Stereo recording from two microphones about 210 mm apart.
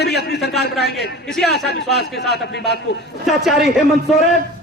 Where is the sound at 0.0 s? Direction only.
50° left (ahead or behind).